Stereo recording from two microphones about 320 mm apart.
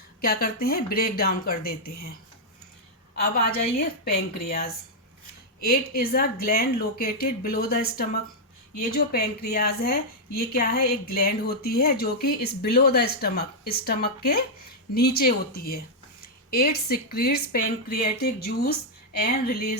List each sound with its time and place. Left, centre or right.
0.2 s a woman's voice: left
3.8 s a woman's voice: left